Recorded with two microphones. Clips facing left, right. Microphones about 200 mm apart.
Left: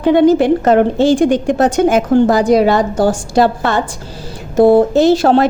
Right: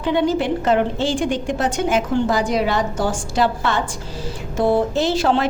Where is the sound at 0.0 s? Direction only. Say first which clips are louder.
Left 9 dB; 50° left (ahead or behind).